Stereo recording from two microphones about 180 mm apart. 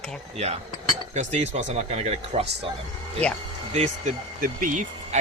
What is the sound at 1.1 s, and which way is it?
Speech, 40° right (ahead or behind).